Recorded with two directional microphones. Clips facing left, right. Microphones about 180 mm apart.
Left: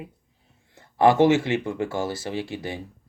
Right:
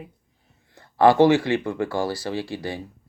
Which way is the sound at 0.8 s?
20° left (ahead or behind).